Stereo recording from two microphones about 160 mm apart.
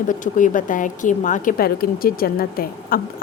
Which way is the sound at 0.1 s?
55° left (ahead or behind).